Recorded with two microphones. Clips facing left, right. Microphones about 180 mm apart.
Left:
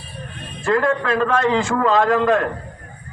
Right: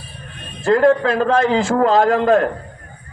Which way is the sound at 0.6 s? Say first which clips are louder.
Right 5 dB; 35° right (ahead or behind).